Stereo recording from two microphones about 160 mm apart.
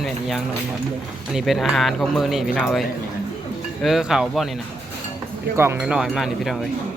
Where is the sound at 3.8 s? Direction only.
5° right (ahead or behind).